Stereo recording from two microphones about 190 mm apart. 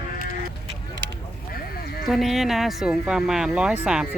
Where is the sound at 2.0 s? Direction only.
Centre (ahead or behind).